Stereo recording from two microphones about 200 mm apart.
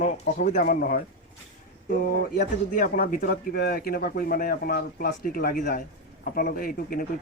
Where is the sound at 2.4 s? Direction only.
45° left (ahead or behind).